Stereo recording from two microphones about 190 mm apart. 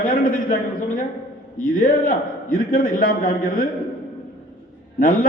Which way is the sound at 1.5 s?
45° left (ahead or behind).